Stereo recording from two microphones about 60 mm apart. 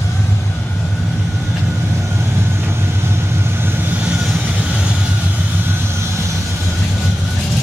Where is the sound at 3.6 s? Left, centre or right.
Right.